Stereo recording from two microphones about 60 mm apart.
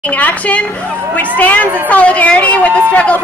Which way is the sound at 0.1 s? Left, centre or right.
Left.